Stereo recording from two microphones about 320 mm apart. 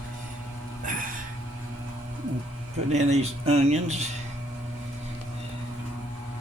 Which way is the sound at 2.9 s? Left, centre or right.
Right.